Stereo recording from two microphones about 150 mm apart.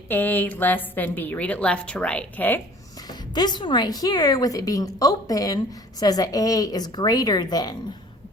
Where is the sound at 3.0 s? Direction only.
25° left (ahead or behind).